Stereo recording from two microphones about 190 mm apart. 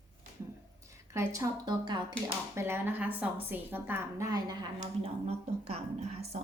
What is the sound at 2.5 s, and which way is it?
A woman's voice, 15° right (ahead or behind).